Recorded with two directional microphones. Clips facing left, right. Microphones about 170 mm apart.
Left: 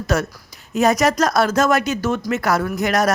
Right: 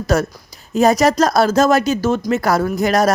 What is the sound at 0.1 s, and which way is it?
A woman's voice, 35° right (ahead or behind).